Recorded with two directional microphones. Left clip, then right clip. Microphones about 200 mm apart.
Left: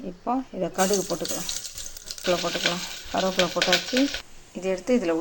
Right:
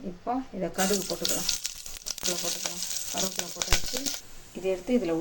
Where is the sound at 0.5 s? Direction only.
25° left (ahead or behind).